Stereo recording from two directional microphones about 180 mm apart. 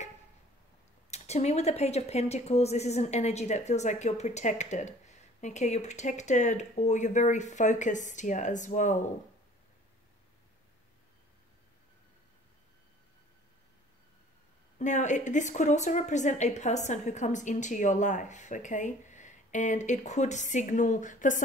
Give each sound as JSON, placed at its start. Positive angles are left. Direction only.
{"t": 1.1, "sound": "speech", "side_deg": 40}
{"t": 14.8, "sound": "a woman's voice", "side_deg": 40}